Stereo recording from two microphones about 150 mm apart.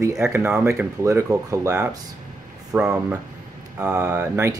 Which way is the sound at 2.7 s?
5° right (ahead or behind).